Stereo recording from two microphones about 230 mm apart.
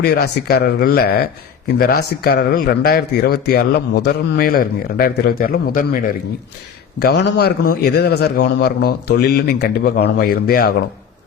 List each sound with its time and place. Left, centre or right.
0.0 s a man's voice: left
7.0 s a man's voice: left